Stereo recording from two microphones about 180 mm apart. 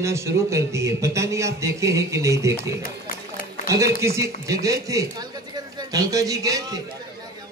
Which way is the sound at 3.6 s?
15° right (ahead or behind).